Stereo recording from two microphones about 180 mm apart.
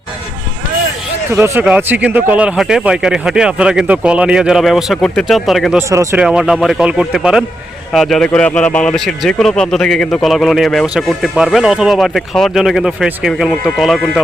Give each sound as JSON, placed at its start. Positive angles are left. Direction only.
{"t": 1.3, "sound": "speech", "side_deg": -15}
{"t": 5.9, "sound": "speech", "side_deg": -15}
{"t": 6.1, "sound": "speech", "side_deg": -5}